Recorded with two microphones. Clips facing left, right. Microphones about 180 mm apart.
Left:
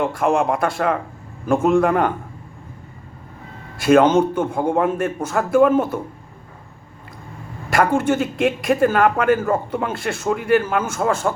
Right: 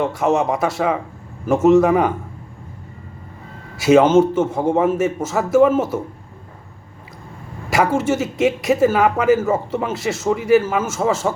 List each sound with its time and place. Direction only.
0.3 s a man's voice: 5° right (ahead or behind)
3.8 s a man's voice: 5° right (ahead or behind)
7.7 s a man's voice: 5° right (ahead or behind)